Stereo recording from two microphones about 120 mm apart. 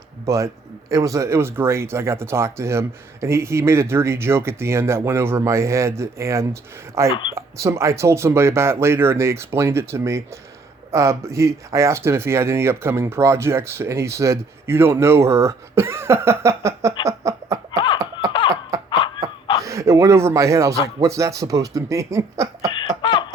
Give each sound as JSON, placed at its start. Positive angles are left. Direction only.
{"t": 0.3, "sound": "speech", "side_deg": -25}
{"t": 17.7, "sound": "a sound", "side_deg": 40}
{"t": 19.6, "sound": "speech", "side_deg": -25}